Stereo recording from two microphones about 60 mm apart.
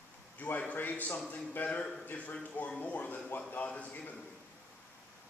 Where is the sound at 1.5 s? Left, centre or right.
Left.